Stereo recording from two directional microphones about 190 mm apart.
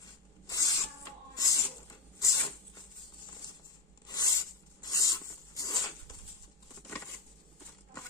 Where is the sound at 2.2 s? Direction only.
15° left (ahead or behind).